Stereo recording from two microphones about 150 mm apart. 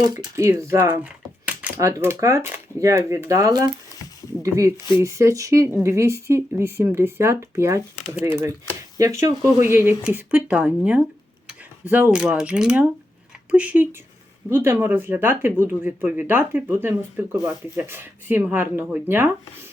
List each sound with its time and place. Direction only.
0.0 s speech: 25° right (ahead or behind)